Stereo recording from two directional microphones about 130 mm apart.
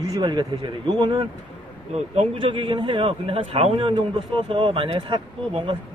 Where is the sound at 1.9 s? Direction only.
50° right (ahead or behind).